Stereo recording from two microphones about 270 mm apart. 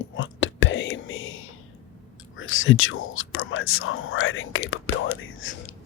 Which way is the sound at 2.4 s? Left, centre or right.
Left.